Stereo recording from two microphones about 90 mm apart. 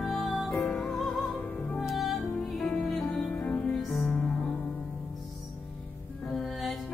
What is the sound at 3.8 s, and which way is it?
Music, centre (ahead or behind).